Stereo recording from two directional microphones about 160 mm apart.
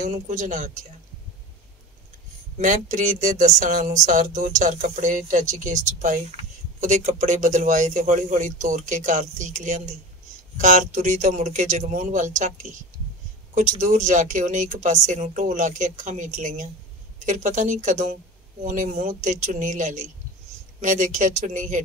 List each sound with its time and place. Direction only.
0.0 s a man's voice: 50° right (ahead or behind)
2.5 s a man's voice: 50° right (ahead or behind)
13.6 s a man's voice: 50° right (ahead or behind)